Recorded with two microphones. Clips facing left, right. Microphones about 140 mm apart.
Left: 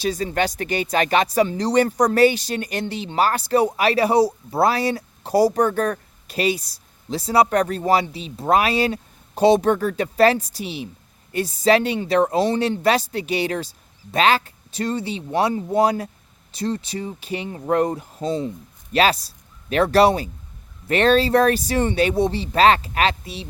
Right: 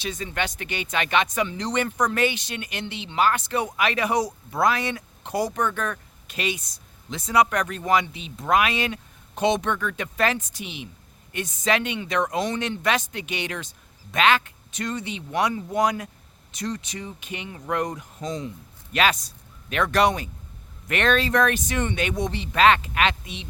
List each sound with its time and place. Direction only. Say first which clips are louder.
0.0 s speech: left 7 dB; 35° left (ahead or behind)